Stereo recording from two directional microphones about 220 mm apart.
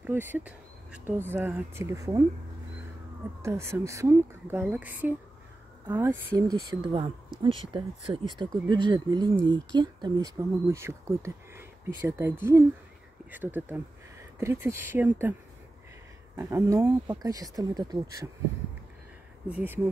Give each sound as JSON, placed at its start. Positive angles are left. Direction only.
{"t": 0.0, "sound": "speech", "side_deg": -10}
{"t": 3.4, "sound": "speech", "side_deg": -10}
{"t": 16.3, "sound": "speech", "side_deg": -10}
{"t": 19.5, "sound": "speech", "side_deg": -10}